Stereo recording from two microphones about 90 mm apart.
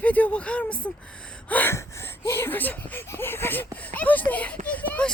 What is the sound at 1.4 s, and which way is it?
Gasp, 20° left (ahead or behind).